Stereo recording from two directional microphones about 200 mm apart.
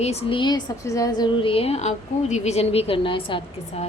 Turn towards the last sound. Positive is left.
turn(degrees=25)  # may be behind; listen again after turning